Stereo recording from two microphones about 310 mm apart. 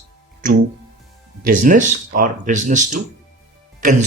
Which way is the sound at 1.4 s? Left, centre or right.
Right.